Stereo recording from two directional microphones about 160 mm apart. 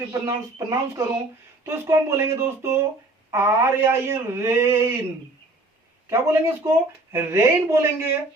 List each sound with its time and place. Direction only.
0.1 s speech: 20° right (ahead or behind)
6.1 s speech: 15° right (ahead or behind)